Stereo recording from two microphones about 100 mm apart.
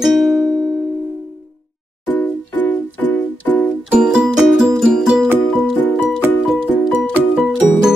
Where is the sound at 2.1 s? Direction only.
15° left (ahead or behind).